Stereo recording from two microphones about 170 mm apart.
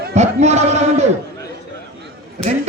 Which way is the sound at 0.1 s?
40° right (ahead or behind).